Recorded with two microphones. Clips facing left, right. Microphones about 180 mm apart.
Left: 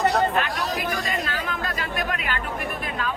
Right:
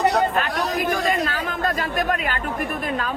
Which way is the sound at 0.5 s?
50° right (ahead or behind).